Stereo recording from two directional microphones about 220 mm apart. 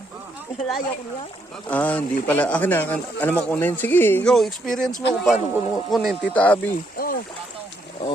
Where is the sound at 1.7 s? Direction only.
5° left (ahead or behind).